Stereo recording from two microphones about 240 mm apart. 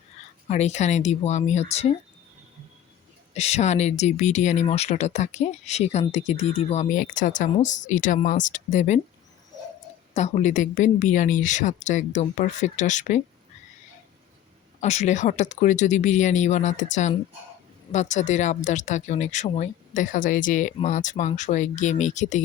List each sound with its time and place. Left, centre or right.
0.4 s speech: left
3.3 s speech: left
10.2 s a woman's voice: left
14.8 s speech: left